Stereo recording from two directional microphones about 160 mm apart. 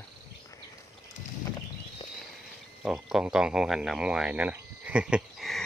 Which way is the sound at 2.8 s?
5° right (ahead or behind).